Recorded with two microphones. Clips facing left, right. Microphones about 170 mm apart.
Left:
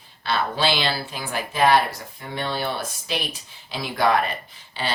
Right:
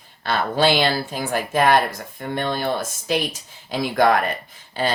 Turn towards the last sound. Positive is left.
turn(degrees=-45)  # may be behind; listen again after turning